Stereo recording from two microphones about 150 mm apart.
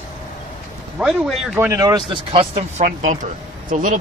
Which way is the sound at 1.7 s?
25° right (ahead or behind).